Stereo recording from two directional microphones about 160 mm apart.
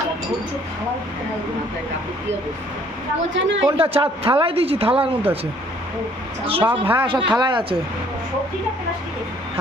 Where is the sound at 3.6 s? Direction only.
35° right (ahead or behind).